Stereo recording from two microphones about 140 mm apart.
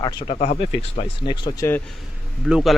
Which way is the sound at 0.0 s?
35° left (ahead or behind).